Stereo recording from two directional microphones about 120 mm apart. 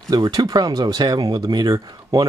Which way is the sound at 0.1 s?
30° right (ahead or behind).